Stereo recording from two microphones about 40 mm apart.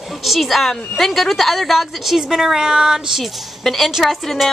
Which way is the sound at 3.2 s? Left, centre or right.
Centre.